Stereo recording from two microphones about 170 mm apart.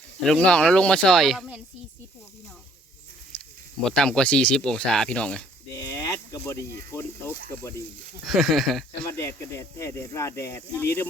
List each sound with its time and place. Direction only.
0.2 s speech: 5° left (ahead or behind)
3.8 s speech: 5° left (ahead or behind)
5.7 s a sound: 20° left (ahead or behind)
8.3 s speech: centre (ahead or behind)
9.0 s speech: 15° left (ahead or behind)